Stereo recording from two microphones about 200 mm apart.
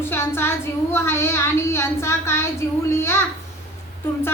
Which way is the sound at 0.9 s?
15° left (ahead or behind).